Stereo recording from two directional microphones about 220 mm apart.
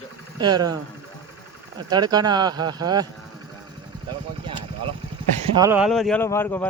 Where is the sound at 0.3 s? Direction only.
20° right (ahead or behind).